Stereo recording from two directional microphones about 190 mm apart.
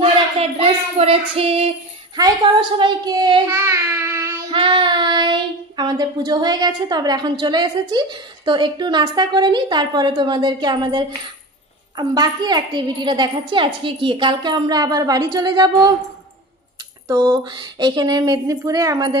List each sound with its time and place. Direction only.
0.0 s female singing: 30° right (ahead or behind)
2.2 s child singing: 20° right (ahead or behind)
4.5 s child singing: 25° right (ahead or behind)
17.1 s child singing: 20° right (ahead or behind)